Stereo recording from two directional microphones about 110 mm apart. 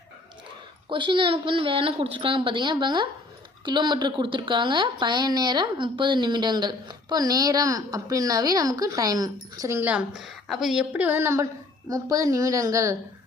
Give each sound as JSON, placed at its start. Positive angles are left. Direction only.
{"t": 0.9, "sound": "a woman's voice", "side_deg": -50}
{"t": 9.8, "sound": "a woman's voice", "side_deg": -10}
{"t": 10.9, "sound": "a woman's voice", "side_deg": -15}